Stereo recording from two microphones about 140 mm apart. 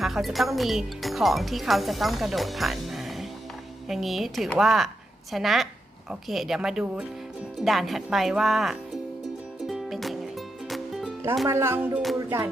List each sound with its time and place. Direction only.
0.0 s speech: centre (ahead or behind)
9.6 s music: centre (ahead or behind)
11.4 s speech: 20° right (ahead or behind)